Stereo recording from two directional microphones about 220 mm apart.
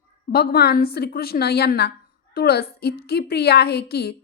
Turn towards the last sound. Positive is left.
turn(degrees=45)  # may be behind; listen again after turning